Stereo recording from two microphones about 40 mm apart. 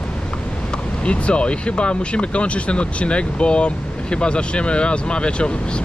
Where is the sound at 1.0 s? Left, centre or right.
Left.